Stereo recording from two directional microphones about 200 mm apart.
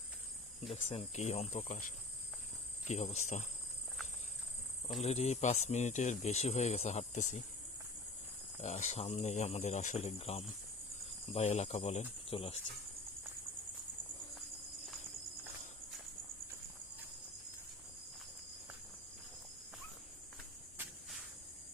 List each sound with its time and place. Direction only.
0.7 s speech: 30° left (ahead or behind)
2.8 s insect: 35° left (ahead or behind)
3.2 s speech: 35° left (ahead or behind)
4.9 s speech: 35° left (ahead or behind)
8.6 s speech: 35° left (ahead or behind)